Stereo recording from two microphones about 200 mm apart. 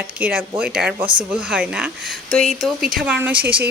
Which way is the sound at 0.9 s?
25° right (ahead or behind).